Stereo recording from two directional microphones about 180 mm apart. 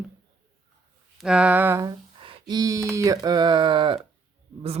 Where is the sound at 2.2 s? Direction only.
25° right (ahead or behind).